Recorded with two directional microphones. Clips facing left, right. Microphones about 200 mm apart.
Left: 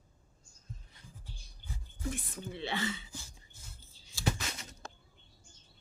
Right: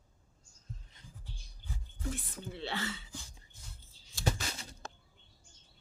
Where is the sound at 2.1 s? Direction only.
15° left (ahead or behind).